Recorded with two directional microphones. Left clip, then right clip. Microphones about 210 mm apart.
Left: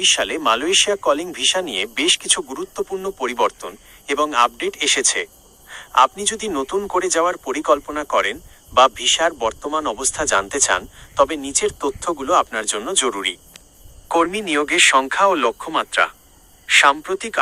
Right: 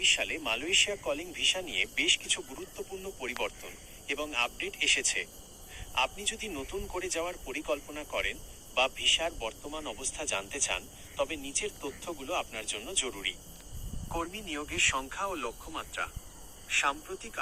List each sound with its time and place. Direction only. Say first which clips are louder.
0.0 s speech: left 11 dB; 45° left (ahead or behind)